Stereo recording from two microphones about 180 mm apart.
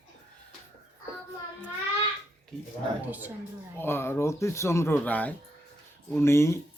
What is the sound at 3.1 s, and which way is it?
Speech, 10° right (ahead or behind).